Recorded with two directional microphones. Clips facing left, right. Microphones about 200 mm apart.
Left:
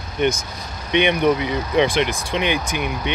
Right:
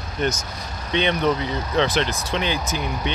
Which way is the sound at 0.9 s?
15° left (ahead or behind).